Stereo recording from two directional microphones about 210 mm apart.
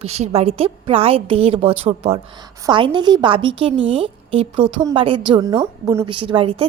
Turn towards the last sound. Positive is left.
turn(degrees=-25)  # may be behind; listen again after turning